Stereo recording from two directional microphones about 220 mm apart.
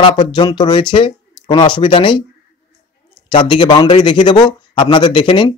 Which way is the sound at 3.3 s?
20° left (ahead or behind).